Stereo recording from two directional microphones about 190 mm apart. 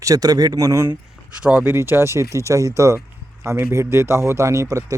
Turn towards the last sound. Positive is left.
turn(degrees=-15)  # may be behind; listen again after turning